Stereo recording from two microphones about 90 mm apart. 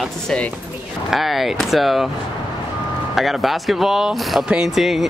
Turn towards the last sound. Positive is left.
turn(degrees=0)  # may be behind; listen again after turning